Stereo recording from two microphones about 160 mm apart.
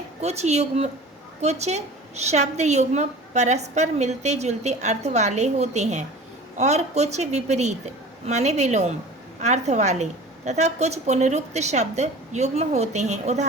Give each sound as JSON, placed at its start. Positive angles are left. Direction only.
{"t": 0.2, "sound": "a woman's voice", "side_deg": -45}